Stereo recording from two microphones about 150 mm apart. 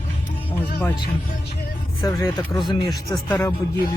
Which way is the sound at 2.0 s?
20° left (ahead or behind).